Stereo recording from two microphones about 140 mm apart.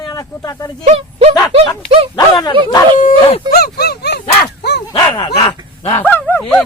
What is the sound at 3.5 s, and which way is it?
Speech, 30° right (ahead or behind).